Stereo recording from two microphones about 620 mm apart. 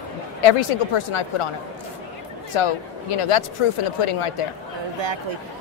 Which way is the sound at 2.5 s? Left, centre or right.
Left.